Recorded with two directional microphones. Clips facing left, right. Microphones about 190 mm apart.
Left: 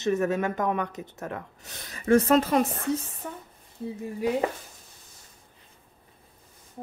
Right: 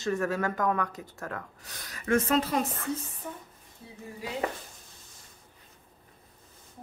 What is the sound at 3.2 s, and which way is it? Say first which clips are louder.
Speech: left 2 dB; 75° left (ahead or behind).